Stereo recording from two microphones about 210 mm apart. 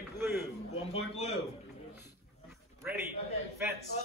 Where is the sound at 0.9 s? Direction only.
30° left (ahead or behind).